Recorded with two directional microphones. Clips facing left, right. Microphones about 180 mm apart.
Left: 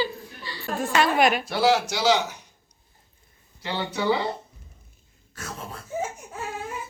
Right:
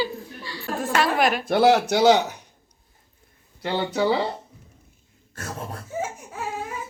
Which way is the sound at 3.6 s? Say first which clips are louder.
Right 3 dB; 45° right (ahead or behind).